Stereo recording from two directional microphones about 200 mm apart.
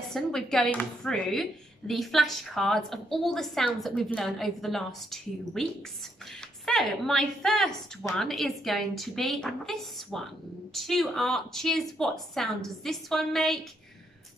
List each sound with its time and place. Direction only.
0.1 s a woman's voice: centre (ahead or behind)